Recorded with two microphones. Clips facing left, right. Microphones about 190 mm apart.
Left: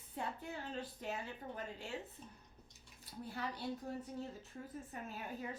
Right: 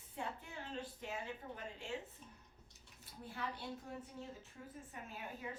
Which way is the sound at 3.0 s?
40° left (ahead or behind).